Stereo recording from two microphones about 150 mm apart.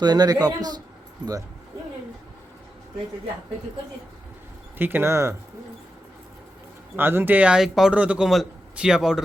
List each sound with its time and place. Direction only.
0.0 s a man's voice: 25° right (ahead or behind)
4.8 s speech: 15° right (ahead or behind)
6.9 s speech: 15° right (ahead or behind)